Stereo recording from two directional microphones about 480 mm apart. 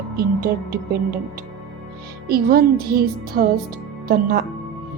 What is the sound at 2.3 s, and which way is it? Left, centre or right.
Speech, centre.